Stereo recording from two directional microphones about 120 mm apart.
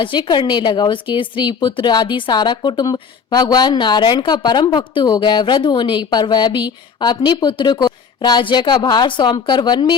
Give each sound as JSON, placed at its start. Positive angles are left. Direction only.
{"t": 0.0, "sound": "speech", "side_deg": 40}